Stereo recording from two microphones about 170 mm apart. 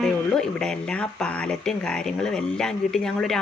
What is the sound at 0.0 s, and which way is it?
Speech, 5° left (ahead or behind).